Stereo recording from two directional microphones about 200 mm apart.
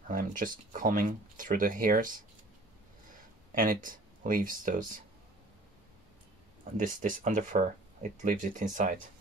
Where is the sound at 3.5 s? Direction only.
45° right (ahead or behind).